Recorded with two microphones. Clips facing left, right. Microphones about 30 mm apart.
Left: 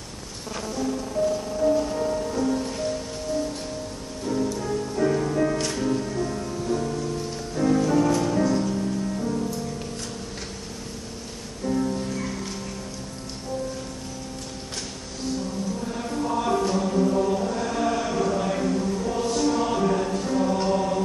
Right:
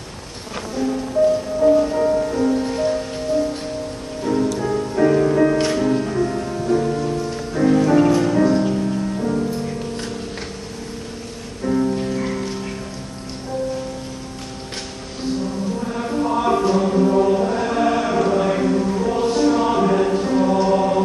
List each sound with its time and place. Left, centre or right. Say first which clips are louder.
1.6 s music: right 7 dB; right
11.6 s music: right 6 dB; right
15.8 s chant: right 6 dB; right
20.7 s music: right 7 dB; right